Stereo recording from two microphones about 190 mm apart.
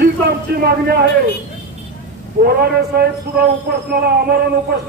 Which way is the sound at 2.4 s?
55° right (ahead or behind).